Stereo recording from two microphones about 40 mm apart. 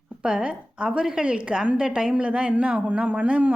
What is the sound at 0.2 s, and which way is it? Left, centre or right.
A woman's voice, right.